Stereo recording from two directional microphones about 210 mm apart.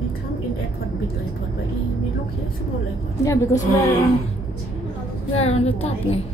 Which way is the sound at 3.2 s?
15° left (ahead or behind).